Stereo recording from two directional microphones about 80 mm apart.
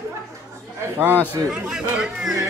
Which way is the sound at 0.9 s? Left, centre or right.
Right.